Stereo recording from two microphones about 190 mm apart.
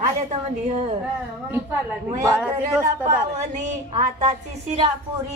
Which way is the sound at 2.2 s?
15° right (ahead or behind).